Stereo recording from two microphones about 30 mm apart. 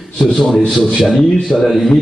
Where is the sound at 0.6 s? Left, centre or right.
Centre.